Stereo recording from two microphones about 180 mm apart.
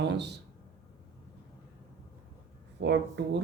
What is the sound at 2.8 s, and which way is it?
Speech, 75° right (ahead or behind).